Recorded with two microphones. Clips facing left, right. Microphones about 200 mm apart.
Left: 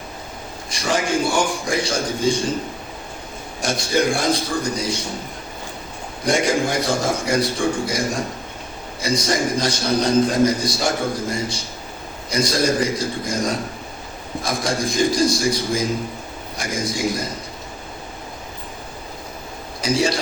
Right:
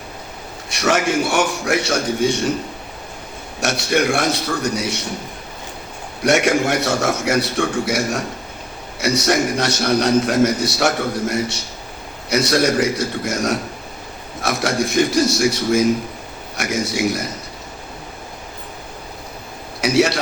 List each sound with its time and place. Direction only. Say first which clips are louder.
0.7 s a man's voice: right 3 dB; 70° right (ahead or behind)
3.6 s a man's voice: right 1 dB; 70° right (ahead or behind)
6.2 s a man's voice: right 3 dB; 70° right (ahead or behind)
19.8 s a man's voice: right 4 dB; 70° right (ahead or behind)